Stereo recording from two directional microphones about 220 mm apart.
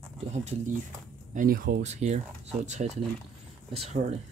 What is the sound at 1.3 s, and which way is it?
Speech, 40° right (ahead or behind).